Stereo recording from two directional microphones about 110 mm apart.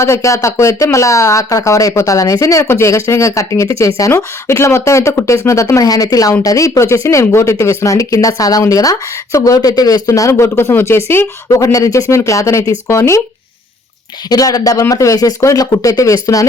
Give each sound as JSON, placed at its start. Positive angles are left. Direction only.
{"t": 0.0, "sound": "speech", "side_deg": 25}
{"t": 14.3, "sound": "speech", "side_deg": 35}